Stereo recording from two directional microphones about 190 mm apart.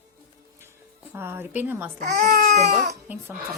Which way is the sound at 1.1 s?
10° right (ahead or behind).